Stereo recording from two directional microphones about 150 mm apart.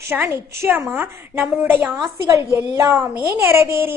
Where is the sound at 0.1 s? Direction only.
15° right (ahead or behind).